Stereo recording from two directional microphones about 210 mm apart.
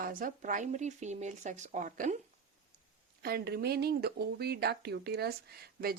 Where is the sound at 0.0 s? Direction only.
40° right (ahead or behind).